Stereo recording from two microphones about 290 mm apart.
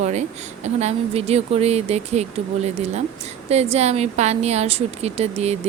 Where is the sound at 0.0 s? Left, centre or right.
Right.